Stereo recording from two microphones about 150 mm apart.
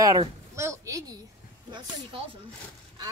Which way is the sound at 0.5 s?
20° right (ahead or behind).